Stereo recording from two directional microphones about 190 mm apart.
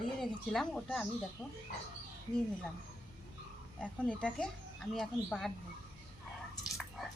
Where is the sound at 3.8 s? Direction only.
5° left (ahead or behind).